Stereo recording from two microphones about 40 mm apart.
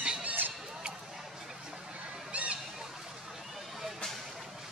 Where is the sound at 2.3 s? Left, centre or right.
Right.